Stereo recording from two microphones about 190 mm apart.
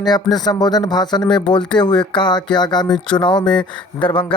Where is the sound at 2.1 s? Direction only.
25° left (ahead or behind).